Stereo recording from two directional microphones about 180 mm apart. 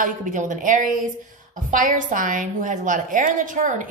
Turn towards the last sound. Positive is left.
turn(degrees=-45)  # may be behind; listen again after turning